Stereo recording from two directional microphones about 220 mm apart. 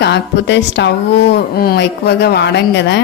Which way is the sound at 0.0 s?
50° left (ahead or behind).